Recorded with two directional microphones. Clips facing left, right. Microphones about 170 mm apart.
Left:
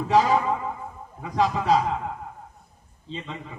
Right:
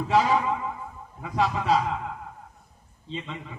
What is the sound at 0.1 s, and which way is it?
A man's voice, 40° left (ahead or behind).